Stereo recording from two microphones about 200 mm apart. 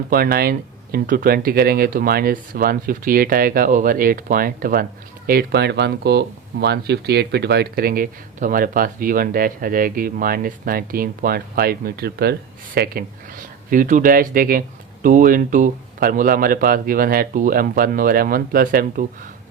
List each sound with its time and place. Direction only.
0.1 s speech: 45° right (ahead or behind)